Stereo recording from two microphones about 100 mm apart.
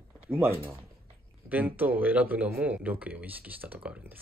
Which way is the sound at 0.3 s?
25° right (ahead or behind).